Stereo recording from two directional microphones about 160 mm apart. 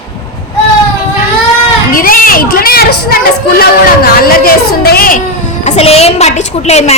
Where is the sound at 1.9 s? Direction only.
60° left (ahead or behind).